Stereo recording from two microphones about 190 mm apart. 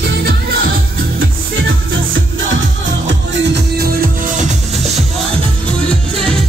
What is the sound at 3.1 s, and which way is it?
Music, 60° right (ahead or behind).